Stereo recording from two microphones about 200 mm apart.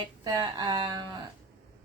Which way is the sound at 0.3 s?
20° right (ahead or behind).